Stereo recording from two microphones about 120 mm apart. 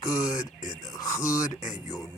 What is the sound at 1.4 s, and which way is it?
Speech, 85° left.